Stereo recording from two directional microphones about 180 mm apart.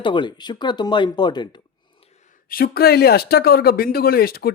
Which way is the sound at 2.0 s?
40° left (ahead or behind).